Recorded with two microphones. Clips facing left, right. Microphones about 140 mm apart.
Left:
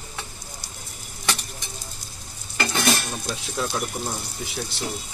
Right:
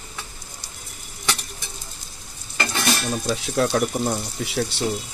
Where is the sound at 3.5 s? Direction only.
65° right (ahead or behind).